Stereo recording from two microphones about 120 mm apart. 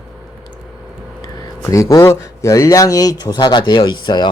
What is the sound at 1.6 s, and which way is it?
Speech, 25° left (ahead or behind).